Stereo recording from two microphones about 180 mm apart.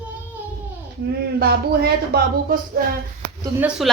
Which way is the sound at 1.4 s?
60° right (ahead or behind).